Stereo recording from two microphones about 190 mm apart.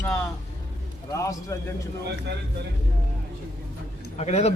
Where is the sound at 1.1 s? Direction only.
15° left (ahead or behind).